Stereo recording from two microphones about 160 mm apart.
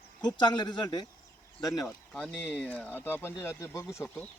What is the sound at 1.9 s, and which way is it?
Speech, 5° left (ahead or behind).